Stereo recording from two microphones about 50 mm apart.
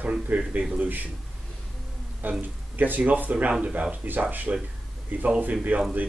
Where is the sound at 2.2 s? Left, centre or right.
Right.